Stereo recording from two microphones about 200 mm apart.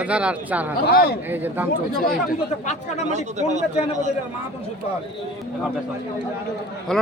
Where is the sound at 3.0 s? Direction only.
35° right (ahead or behind).